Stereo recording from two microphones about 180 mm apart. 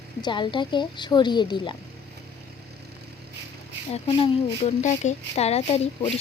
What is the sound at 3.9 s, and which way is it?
A woman's voice, 30° left (ahead or behind).